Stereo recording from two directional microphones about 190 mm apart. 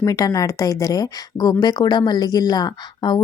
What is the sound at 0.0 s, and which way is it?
Speech, 20° left (ahead or behind).